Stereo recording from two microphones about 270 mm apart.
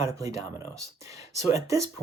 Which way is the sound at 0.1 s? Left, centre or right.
Centre.